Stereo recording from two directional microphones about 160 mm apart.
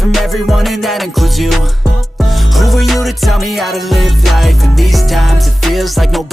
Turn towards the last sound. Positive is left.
turn(degrees=0)  # may be behind; listen again after turning